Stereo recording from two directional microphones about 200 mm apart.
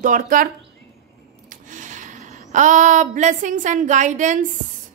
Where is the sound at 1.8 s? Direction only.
40° right (ahead or behind).